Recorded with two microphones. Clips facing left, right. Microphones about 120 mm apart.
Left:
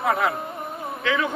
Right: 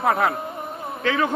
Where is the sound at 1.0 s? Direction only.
45° right (ahead or behind).